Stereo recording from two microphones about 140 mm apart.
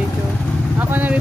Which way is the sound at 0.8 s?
10° right (ahead or behind).